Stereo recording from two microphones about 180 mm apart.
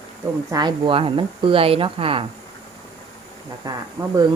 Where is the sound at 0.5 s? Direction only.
25° right (ahead or behind).